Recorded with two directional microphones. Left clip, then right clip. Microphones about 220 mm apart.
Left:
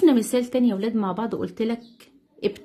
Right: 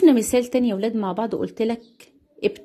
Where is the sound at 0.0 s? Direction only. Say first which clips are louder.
Right 3 dB; 25° right (ahead or behind).